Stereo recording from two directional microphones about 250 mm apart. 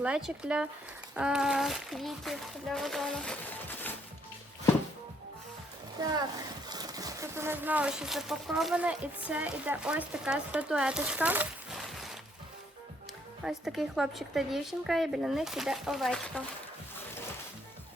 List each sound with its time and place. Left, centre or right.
0.0 s speech: centre
6.0 s a child's voice: centre
13.4 s speech: centre